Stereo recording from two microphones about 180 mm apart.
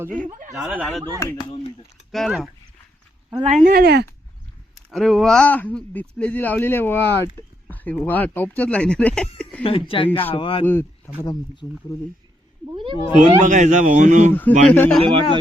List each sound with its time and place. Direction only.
0.2 s speech: 50° right (ahead or behind)
0.5 s speech: 5° right (ahead or behind)
1.5 s speech: 30° left (ahead or behind)
2.1 s speech: centre (ahead or behind)
3.4 s speech: 40° right (ahead or behind)
3.7 s speech: 60° right (ahead or behind)
4.9 s speech: centre (ahead or behind)
9.6 s speech: 30° left (ahead or behind)
10.7 s speech: 10° left (ahead or behind)
11.2 s speech: 25° left (ahead or behind)
12.7 s speech: 30° right (ahead or behind)
13.4 s speech: 45° right (ahead or behind)
14.7 s speech: 5° left (ahead or behind)
15.0 s speech: 30° right (ahead or behind)